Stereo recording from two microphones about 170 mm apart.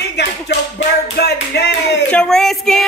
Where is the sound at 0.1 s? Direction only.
80° left.